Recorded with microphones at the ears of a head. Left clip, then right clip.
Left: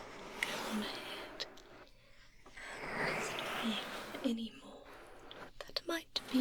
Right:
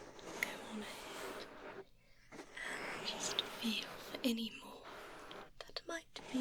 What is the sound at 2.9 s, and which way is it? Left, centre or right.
Whispering, left.